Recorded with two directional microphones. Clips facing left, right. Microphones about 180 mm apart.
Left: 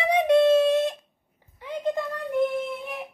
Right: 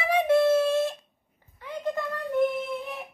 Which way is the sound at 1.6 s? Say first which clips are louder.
Left 3 dB; 25° left (ahead or behind).